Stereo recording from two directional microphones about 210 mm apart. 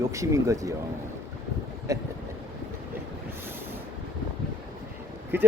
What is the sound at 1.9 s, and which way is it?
Speech, 15° right (ahead or behind).